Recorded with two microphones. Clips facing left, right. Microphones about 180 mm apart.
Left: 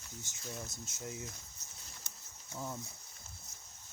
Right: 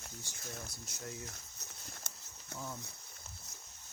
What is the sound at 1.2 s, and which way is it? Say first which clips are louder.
Horse: left 1 dB; 50° right (ahead or behind).